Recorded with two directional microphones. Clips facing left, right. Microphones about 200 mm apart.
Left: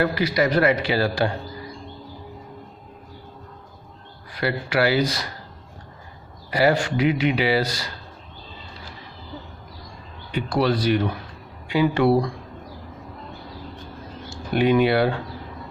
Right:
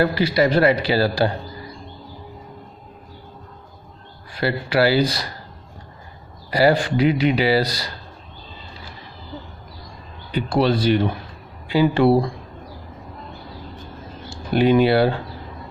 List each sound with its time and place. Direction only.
0.0 s a man's voice: 30° right (ahead or behind)
4.3 s a man's voice: 30° right (ahead or behind)
6.5 s a man's voice: 35° right (ahead or behind)
10.3 s a man's voice: 25° right (ahead or behind)
14.3 s speech: 30° right (ahead or behind)